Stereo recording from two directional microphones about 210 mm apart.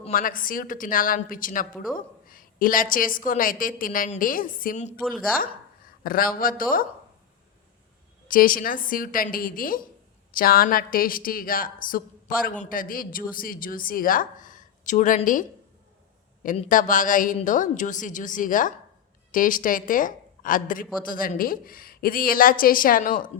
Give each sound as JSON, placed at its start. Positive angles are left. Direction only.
{"t": 0.1, "sound": "a woman's voice", "side_deg": 40}
{"t": 2.2, "sound": "a sound", "side_deg": 40}
{"t": 2.9, "sound": "a woman's voice", "side_deg": 40}
{"t": 6.0, "sound": "a woman's voice", "side_deg": 45}
{"t": 8.3, "sound": "a woman's voice", "side_deg": 40}